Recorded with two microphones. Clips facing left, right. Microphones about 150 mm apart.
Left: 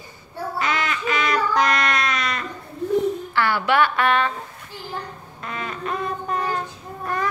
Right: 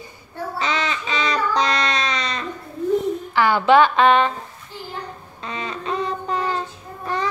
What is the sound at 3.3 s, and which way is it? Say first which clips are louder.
A woman's voice: right 9 dB; 15° right (ahead or behind).